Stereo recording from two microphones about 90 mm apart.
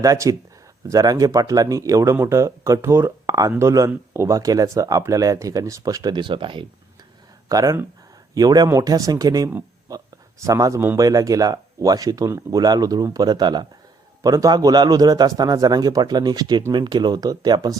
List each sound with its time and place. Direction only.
0.0 s speech: 40° right (ahead or behind)
4.4 s speech: 40° right (ahead or behind); by 6.7 s 70° right (ahead or behind)
7.4 s a man's voice: 40° right (ahead or behind)
14.2 s a man's voice: 40° right (ahead or behind)